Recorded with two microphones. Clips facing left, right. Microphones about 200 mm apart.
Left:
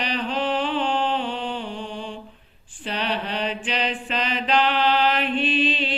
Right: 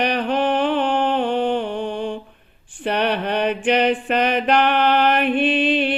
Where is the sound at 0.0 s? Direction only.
60° right (ahead or behind).